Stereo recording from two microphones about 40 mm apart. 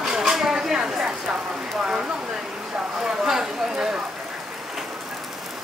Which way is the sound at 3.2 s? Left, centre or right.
Centre.